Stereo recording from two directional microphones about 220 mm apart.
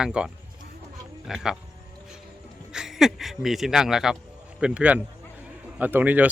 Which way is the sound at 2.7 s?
Centre (ahead or behind).